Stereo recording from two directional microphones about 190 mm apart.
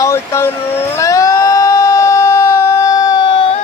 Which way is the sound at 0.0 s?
15° left (ahead or behind).